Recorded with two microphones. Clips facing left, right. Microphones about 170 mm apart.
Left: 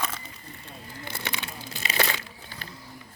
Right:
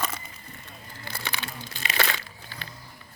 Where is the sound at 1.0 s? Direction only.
20° left (ahead or behind).